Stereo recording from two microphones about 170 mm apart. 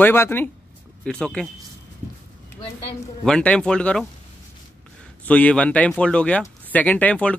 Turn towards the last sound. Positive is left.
turn(degrees=10)  # may be behind; listen again after turning